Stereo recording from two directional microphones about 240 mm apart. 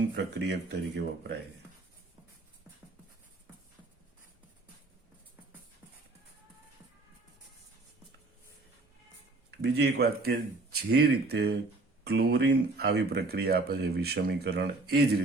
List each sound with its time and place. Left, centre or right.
0.4 s speech: right
9.6 s speech: right